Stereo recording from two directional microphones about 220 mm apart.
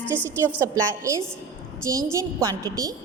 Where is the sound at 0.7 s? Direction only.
15° right (ahead or behind).